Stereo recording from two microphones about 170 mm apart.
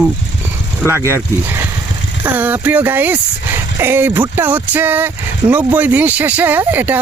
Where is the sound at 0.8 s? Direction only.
15° right (ahead or behind).